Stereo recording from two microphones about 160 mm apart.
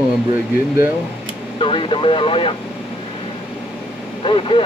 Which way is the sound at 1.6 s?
35° left (ahead or behind).